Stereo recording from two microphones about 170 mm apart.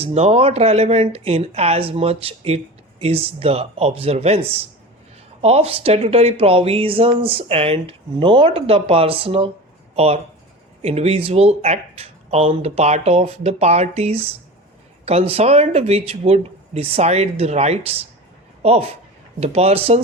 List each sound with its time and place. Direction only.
0.0 s speech: 35° right (ahead or behind)